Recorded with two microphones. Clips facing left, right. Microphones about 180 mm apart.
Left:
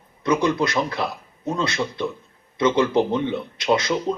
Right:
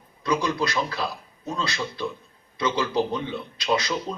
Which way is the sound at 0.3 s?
20° left (ahead or behind).